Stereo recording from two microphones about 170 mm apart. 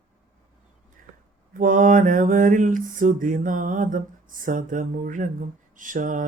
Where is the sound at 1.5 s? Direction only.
50° right (ahead or behind).